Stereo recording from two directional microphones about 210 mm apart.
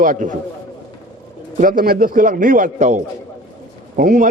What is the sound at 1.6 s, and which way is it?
A man's voice, 40° right (ahead or behind).